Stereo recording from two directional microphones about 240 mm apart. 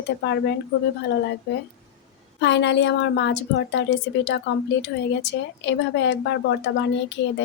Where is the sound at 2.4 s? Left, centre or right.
Left.